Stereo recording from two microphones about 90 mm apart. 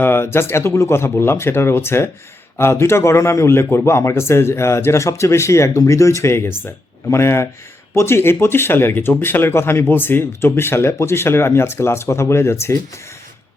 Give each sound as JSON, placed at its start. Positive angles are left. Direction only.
{"t": 0.0, "sound": "a man's voice", "side_deg": 25}